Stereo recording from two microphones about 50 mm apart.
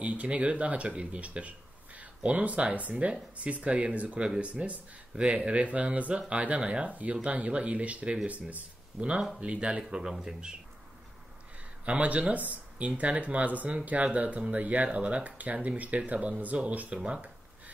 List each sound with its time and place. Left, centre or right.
0.0 s speech: right
11.8 s speech: right